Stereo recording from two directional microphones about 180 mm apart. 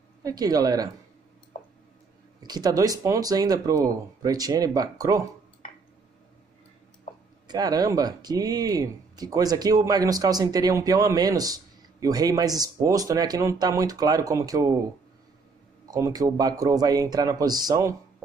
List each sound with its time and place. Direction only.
0.2 s speech: 20° right (ahead or behind)
2.4 s speech: 20° right (ahead or behind)
7.4 s speech: 20° right (ahead or behind)
15.9 s speech: 20° right (ahead or behind)